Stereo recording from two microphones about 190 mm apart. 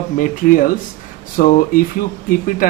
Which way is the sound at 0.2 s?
45° left (ahead or behind).